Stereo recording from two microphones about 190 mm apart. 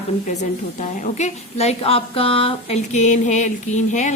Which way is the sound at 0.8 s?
40° left (ahead or behind).